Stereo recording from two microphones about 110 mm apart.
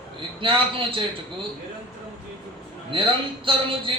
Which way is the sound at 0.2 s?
50° right (ahead or behind).